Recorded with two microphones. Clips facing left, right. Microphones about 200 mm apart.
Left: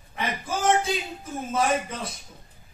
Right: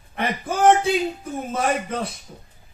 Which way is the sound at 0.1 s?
60° right (ahead or behind).